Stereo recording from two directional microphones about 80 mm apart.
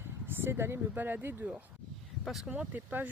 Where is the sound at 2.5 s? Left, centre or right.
Right.